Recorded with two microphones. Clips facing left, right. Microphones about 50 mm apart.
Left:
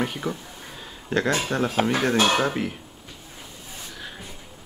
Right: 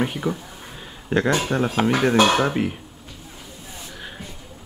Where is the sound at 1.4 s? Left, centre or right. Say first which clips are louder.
Right 2 dB; centre.